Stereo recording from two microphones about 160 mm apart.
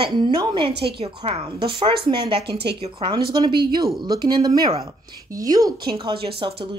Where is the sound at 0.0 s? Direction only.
30° right (ahead or behind).